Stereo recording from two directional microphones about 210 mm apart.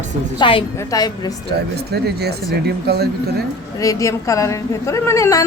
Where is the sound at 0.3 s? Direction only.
20° left (ahead or behind).